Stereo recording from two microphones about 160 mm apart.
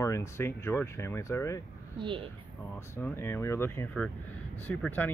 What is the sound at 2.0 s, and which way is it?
Speech, 30° right (ahead or behind).